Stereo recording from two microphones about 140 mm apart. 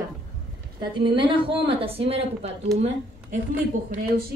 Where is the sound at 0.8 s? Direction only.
35° right (ahead or behind).